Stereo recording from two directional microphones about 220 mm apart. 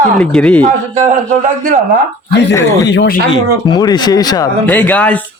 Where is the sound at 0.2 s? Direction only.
5° left (ahead or behind).